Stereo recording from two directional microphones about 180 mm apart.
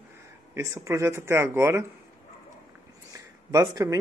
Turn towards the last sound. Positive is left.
turn(degrees=-20)  # may be behind; listen again after turning